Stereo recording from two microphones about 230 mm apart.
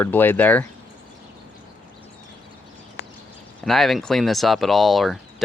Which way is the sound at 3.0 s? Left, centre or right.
Left.